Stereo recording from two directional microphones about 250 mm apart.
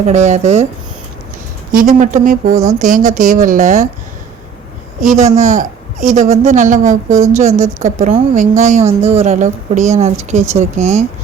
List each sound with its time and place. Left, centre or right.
0.0 s a woman's voice: right
1.7 s speech: right
4.9 s a woman's voice: right